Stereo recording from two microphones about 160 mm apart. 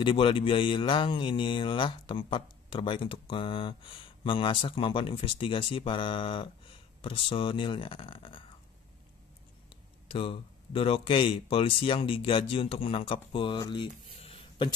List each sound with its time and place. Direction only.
0.0 s speech: 35° left (ahead or behind)
10.1 s speech: 35° left (ahead or behind)